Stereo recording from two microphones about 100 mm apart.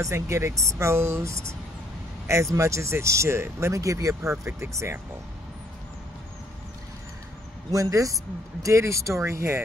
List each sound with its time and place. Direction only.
0.0 s speech: 30° right (ahead or behind)
7.7 s speech: 35° right (ahead or behind)